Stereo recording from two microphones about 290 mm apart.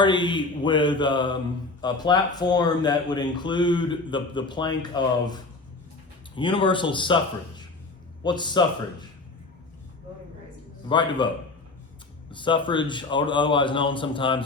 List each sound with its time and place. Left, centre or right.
0.0 s speech: centre
8.2 s speech: centre
10.8 s speech: centre
12.3 s speech: centre